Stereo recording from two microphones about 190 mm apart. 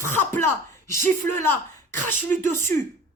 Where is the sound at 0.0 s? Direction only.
15° left (ahead or behind).